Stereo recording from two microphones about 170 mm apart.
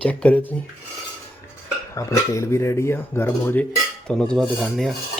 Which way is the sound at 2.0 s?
15° left (ahead or behind).